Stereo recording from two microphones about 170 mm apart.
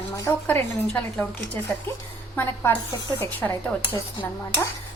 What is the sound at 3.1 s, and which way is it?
Speech, 15° left (ahead or behind).